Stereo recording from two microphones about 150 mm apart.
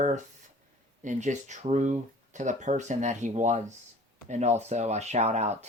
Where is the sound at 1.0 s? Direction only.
55° right (ahead or behind).